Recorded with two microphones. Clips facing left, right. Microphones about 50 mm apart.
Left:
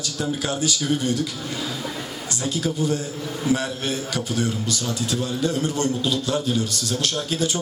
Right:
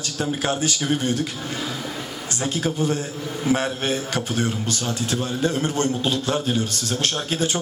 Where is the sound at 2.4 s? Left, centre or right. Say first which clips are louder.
Right 1 dB; right.